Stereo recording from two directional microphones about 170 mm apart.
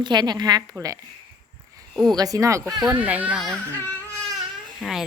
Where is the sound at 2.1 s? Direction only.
20° right (ahead or behind).